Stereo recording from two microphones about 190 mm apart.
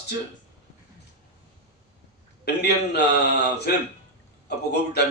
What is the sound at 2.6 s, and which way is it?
Speech, 60° left (ahead or behind).